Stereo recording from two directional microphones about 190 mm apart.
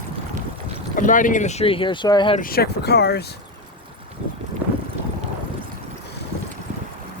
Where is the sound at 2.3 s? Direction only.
50° left (ahead or behind).